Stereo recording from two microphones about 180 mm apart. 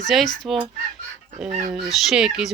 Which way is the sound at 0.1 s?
Centre (ahead or behind).